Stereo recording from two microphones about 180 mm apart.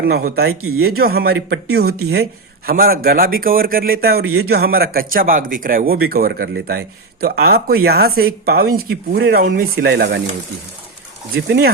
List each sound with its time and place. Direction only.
0.0 s speech: 55° right (ahead or behind); by 10.2 s 70° right (ahead or behind)
11.3 s speech: 70° right (ahead or behind)